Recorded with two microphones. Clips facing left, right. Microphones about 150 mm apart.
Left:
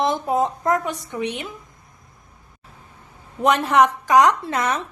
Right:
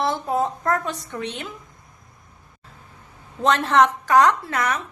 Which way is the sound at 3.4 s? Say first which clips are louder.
Left 1 dB; 10° left (ahead or behind).